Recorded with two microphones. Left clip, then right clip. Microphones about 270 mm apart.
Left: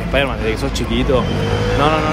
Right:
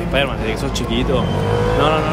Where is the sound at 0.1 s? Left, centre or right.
Centre.